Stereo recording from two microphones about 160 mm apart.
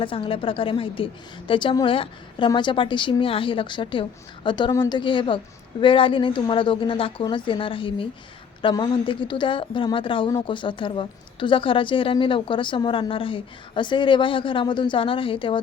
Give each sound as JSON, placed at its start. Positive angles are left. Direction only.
{"t": 0.0, "sound": "a woman's voice", "side_deg": 35}